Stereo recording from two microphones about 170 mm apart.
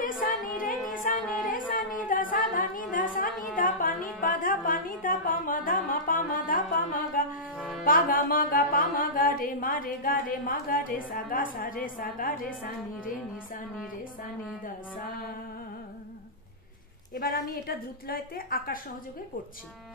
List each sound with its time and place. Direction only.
0.0 s music: 55° left (ahead or behind)
1.3 s a sound: 55° left (ahead or behind)
3.5 s music: 55° left (ahead or behind)
7.5 s music: centre (ahead or behind)
7.8 s music: 55° left (ahead or behind)
17.1 s music: 55° left (ahead or behind)